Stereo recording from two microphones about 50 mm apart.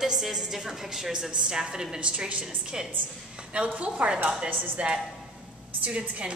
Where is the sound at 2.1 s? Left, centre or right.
Right.